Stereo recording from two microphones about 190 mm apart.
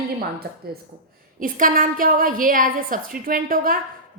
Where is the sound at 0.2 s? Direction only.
55° right (ahead or behind).